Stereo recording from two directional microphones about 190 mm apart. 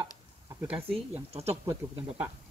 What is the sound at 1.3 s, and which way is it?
Speech, 35° right (ahead or behind).